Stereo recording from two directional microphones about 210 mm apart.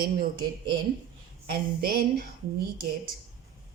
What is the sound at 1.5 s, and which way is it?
Speech, 45° right (ahead or behind).